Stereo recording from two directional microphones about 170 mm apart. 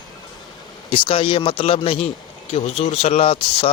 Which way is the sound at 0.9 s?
30° left (ahead or behind).